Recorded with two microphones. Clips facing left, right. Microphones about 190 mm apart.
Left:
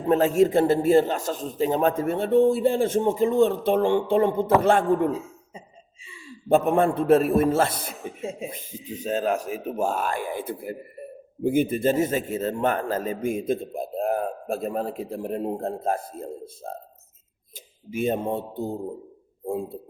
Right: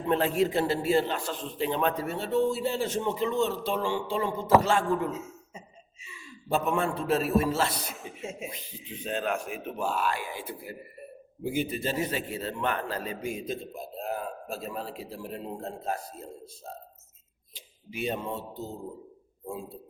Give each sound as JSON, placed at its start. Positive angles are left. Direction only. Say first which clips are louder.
{"t": 0.0, "sound": "a man's voice", "louder": "left 6 dB", "side_deg": 40}
{"t": 5.1, "sound": "a sound", "louder": "left 6 dB", "side_deg": 30}
{"t": 6.5, "sound": "a man's voice", "louder": "left 8 dB", "side_deg": 55}
{"t": 8.2, "sound": "speech", "louder": "left 6 dB", "side_deg": 35}
{"t": 8.4, "sound": "a man's voice", "louder": "left 6 dB", "side_deg": 45}
{"t": 17.5, "sound": "a man's voice", "louder": "left 9 dB", "side_deg": 50}